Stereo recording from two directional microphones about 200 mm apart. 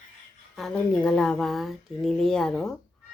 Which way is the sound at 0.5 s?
Centre (ahead or behind).